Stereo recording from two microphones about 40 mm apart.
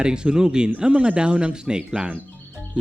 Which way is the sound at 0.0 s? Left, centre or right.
Right.